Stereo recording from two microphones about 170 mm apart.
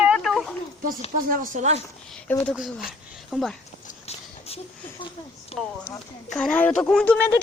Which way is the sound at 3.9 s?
40° left (ahead or behind).